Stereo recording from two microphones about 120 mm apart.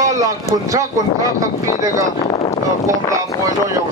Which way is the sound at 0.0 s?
30° right (ahead or behind).